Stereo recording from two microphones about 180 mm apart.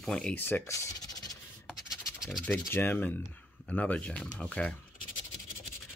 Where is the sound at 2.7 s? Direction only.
10° left (ahead or behind).